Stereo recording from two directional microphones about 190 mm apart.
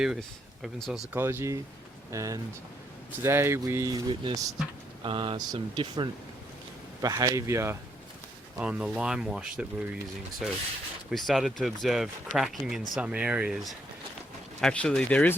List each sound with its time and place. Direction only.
0.0 s speech: centre (ahead or behind)
1.1 s speech: 10° right (ahead or behind); by 15.4 s 5° left (ahead or behind)